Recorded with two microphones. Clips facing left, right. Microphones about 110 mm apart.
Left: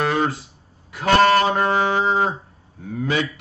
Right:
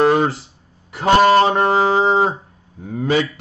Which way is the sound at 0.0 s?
30° right (ahead or behind).